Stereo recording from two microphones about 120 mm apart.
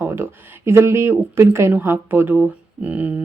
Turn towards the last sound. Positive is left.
turn(degrees=-15)  # may be behind; listen again after turning